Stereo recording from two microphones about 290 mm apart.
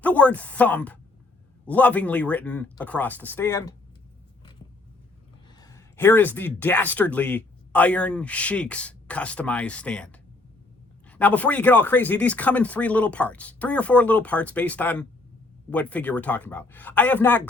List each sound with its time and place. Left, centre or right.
0.0 s speech: centre
5.5 s speech: centre